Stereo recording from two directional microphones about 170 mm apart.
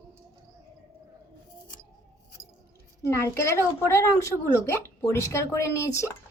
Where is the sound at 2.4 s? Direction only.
15° left (ahead or behind).